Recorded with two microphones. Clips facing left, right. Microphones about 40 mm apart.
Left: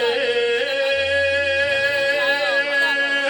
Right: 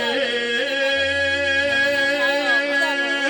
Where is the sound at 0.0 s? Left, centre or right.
Centre.